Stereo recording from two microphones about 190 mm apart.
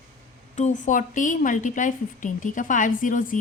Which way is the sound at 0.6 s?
40° left (ahead or behind).